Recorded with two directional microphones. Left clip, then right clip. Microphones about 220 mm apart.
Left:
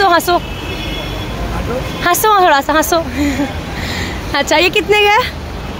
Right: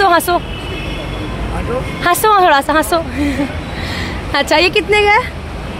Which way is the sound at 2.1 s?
Centre (ahead or behind).